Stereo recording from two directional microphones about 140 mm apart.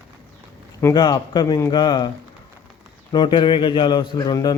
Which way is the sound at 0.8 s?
25° left (ahead or behind).